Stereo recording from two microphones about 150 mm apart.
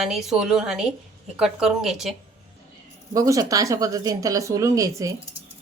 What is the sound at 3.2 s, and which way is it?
Speech, 20° right (ahead or behind).